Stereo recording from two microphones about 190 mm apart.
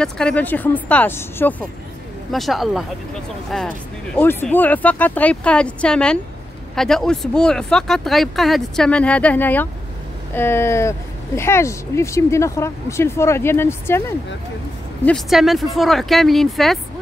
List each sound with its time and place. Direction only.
0.0 s speech: 5° left (ahead or behind)
2.3 s speech: centre (ahead or behind)
15.0 s speech: centre (ahead or behind)